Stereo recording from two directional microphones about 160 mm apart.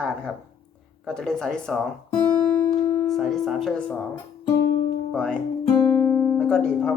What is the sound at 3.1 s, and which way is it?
Speech, centre (ahead or behind).